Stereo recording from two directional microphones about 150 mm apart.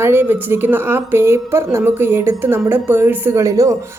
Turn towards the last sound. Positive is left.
turn(degrees=-20)  # may be behind; listen again after turning